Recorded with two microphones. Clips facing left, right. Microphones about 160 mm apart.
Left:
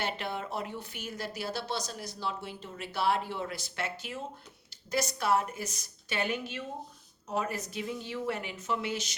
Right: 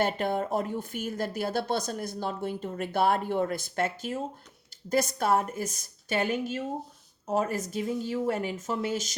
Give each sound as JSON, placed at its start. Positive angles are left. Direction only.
{"t": 0.0, "sound": "speech", "side_deg": -50}